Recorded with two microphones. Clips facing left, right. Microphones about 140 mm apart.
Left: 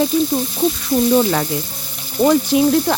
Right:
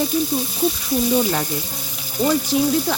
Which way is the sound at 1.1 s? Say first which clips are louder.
Left 4 dB; 80° left.